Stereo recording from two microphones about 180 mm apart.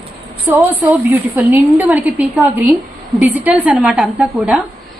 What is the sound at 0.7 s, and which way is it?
A woman's voice, 10° right (ahead or behind).